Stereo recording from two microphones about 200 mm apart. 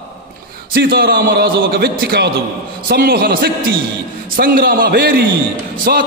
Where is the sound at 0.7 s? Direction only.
50° right (ahead or behind).